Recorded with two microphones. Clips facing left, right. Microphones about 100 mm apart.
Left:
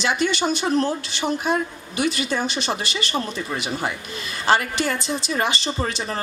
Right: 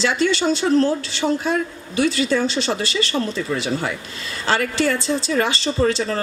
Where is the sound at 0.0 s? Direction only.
20° left (ahead or behind).